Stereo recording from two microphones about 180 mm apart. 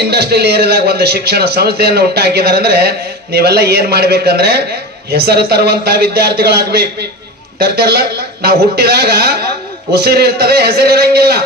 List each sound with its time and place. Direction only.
0.1 s a man's voice: 65° right (ahead or behind)